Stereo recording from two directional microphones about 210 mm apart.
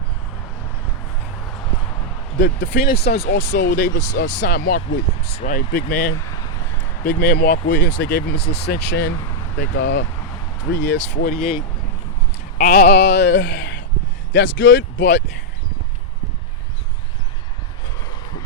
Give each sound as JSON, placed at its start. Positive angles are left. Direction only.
{"t": 2.4, "sound": "speech", "side_deg": 55}
{"t": 6.1, "sound": "a sound", "side_deg": 15}
{"t": 7.0, "sound": "speech", "side_deg": 50}
{"t": 12.5, "sound": "speech", "side_deg": 40}